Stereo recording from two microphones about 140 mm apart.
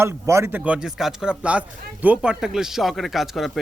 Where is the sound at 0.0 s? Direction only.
20° right (ahead or behind).